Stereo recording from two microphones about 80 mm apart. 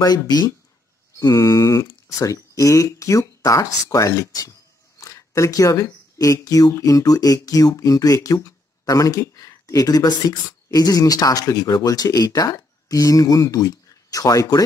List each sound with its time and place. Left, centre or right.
0.0 s speech: left
1.2 s speech: left